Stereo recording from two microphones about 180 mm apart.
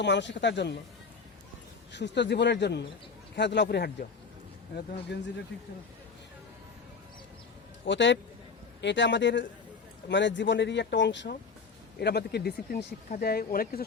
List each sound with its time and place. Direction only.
0.0 s speech: 80° left
1.9 s speech: 75° left (ahead or behind)
7.9 s speech: 85° left
11.9 s speech: 65° left (ahead or behind)